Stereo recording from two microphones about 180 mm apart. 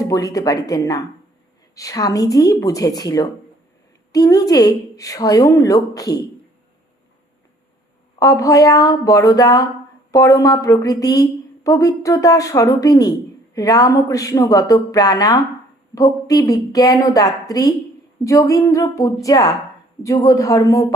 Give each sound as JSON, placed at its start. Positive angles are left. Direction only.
{"t": 0.0, "sound": "a woman's voice", "side_deg": 20}
{"t": 8.2, "sound": "a woman's voice", "side_deg": 20}